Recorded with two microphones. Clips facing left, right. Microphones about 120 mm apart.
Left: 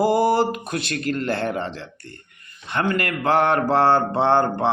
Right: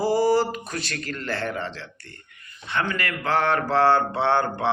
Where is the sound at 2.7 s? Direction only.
45° left (ahead or behind).